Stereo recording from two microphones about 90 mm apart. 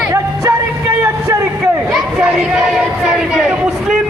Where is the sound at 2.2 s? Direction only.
10° right (ahead or behind).